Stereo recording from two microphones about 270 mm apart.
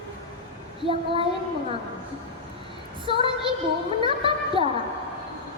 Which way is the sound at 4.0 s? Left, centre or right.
Centre.